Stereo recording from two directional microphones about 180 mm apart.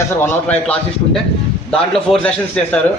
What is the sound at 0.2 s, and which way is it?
A man's voice, 10° left (ahead or behind).